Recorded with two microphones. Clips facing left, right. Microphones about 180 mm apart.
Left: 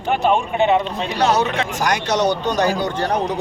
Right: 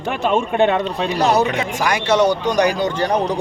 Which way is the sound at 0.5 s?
60° right (ahead or behind).